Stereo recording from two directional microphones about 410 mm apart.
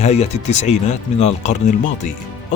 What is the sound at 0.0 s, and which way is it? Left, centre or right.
Speech, centre.